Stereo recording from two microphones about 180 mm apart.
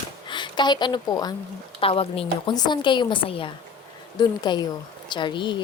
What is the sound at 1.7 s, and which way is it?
A woman's voice, 30° left (ahead or behind).